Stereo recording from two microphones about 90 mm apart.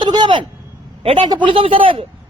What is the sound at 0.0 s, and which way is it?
A man's voice, 60° right (ahead or behind).